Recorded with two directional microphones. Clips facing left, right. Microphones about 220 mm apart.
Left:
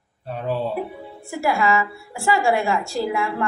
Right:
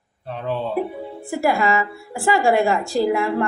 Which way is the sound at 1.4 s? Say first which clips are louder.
Right 1 dB; 35° right (ahead or behind).